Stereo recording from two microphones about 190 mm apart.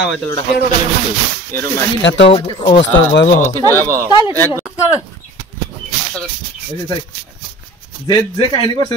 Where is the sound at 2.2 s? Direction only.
25° left (ahead or behind).